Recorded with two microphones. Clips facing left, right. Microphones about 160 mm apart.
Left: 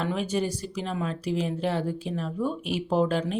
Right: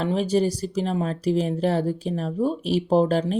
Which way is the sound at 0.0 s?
35° right (ahead or behind).